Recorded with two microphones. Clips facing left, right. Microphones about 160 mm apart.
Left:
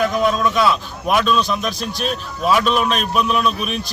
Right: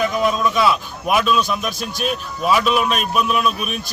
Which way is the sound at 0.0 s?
Centre (ahead or behind).